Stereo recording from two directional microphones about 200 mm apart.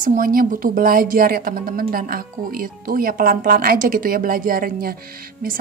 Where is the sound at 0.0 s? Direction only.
45° right (ahead or behind).